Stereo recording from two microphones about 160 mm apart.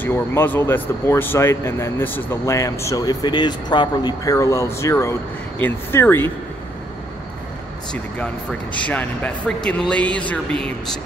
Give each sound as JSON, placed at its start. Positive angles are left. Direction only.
{"t": 0.0, "sound": "speech", "side_deg": 15}
{"t": 7.9, "sound": "speech", "side_deg": 5}